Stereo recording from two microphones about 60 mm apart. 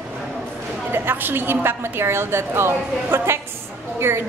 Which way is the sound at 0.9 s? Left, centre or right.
Right.